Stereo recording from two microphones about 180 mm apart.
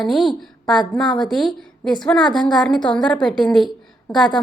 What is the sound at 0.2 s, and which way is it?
Speech, 25° left (ahead or behind).